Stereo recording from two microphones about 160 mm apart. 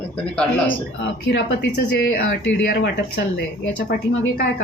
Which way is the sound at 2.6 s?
80° left.